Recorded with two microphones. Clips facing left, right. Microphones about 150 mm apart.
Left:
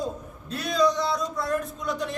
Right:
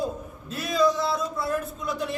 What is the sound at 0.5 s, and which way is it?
A man's voice, 5° right (ahead or behind).